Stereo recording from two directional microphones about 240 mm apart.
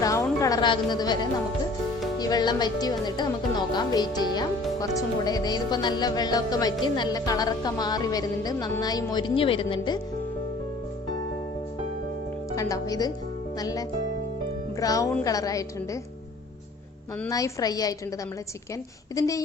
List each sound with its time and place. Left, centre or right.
0.0 s music: centre
2.1 s a woman's voice: centre
12.5 s a woman's voice: centre
17.2 s a woman's voice: centre
19.1 s a woman's voice: centre